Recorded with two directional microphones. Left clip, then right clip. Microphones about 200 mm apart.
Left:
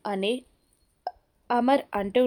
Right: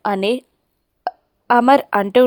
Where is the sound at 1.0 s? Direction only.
20° right (ahead or behind).